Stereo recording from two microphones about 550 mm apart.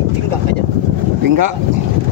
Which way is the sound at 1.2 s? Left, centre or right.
Right.